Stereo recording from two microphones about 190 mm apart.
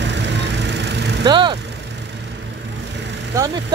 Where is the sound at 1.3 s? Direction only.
25° right (ahead or behind).